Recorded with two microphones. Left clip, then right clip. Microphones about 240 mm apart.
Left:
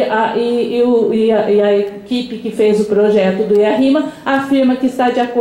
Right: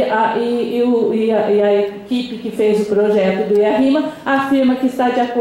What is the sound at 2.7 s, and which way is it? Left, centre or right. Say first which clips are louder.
Speech: left 2 dB; centre.